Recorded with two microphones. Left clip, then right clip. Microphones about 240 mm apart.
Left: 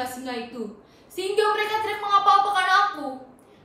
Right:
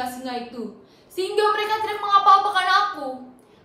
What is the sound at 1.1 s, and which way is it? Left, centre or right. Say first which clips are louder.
A woman's voice: right 1 dB; centre.